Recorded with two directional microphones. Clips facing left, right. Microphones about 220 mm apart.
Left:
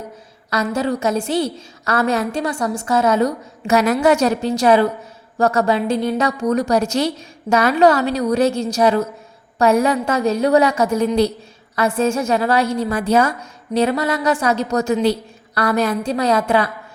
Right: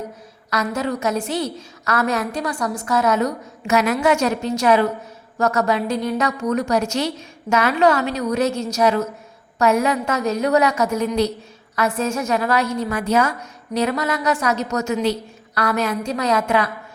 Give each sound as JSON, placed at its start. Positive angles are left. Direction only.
{"t": 0.5, "sound": "a woman's voice", "side_deg": 30}